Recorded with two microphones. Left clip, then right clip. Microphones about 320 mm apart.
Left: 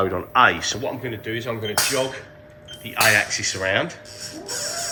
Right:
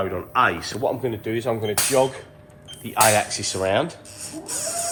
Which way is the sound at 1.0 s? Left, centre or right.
Centre.